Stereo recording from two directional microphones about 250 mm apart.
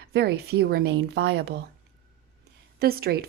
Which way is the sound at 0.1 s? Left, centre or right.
Right.